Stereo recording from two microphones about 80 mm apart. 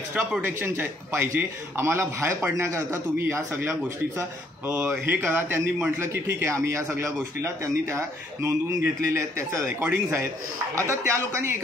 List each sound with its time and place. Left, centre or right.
0.2 s speech: centre
0.6 s a man's voice: right
4.8 s a man's voice: right